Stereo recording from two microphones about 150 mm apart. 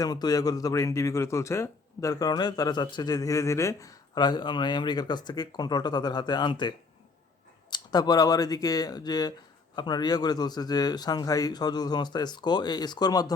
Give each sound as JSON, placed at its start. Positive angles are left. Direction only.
{"t": 0.0, "sound": "speech", "side_deg": 25}